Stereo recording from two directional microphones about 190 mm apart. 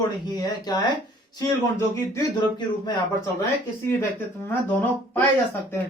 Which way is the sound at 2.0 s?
20° left (ahead or behind).